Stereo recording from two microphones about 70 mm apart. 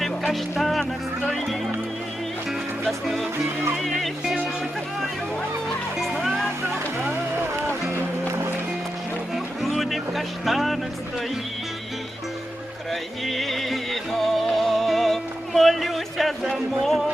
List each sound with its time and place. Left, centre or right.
0.3 s speech: centre
2.8 s speech: centre
6.0 s music: centre
8.3 s music: right
9.3 s music: centre
12.9 s music: centre